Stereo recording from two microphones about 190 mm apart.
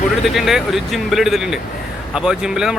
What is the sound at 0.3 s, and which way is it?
Speech, centre (ahead or behind).